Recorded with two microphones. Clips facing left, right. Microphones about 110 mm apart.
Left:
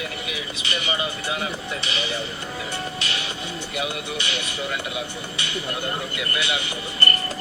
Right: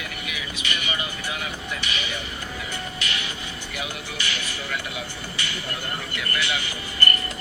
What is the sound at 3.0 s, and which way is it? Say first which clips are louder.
Music: left 1 dB; 30° left (ahead or behind).